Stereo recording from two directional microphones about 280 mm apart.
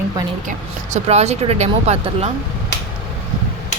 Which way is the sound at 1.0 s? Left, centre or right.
Right.